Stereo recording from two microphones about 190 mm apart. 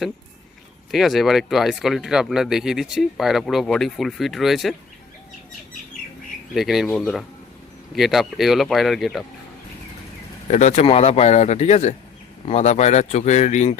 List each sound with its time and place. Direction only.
0.9 s speech: centre (ahead or behind)
6.5 s speech: centre (ahead or behind)
10.5 s a man's voice: 40° left (ahead or behind)